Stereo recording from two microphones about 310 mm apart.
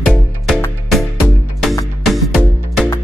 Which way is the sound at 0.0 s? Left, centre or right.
Centre.